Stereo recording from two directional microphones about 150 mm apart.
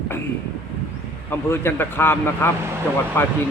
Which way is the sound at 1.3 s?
15° left (ahead or behind).